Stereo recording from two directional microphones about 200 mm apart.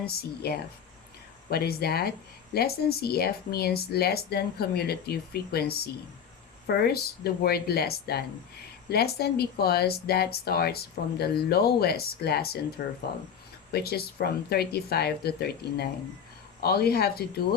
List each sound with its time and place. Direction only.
0.0 s speech: 50° left (ahead or behind)